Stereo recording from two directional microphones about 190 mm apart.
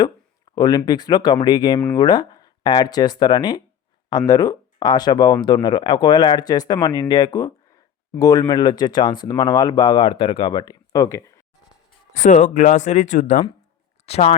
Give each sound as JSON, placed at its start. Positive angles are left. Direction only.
{"t": 0.5, "sound": "speech", "side_deg": 20}
{"t": 12.1, "sound": "speech", "side_deg": 40}